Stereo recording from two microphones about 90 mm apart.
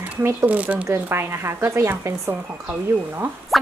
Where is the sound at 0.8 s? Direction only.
30° right (ahead or behind).